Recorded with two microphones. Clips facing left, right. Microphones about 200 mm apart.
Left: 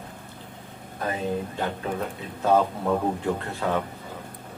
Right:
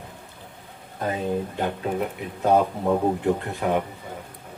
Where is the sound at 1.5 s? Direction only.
15° right (ahead or behind).